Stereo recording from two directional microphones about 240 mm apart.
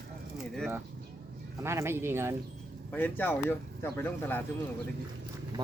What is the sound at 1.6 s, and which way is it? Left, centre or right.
Speech, centre.